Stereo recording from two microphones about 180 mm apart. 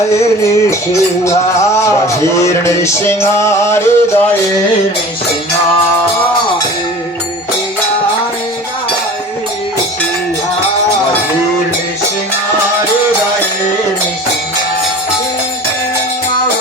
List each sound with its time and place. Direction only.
1.2 s music: 15° left (ahead or behind)